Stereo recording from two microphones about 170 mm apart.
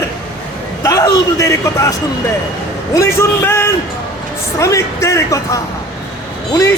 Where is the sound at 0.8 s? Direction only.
20° left (ahead or behind).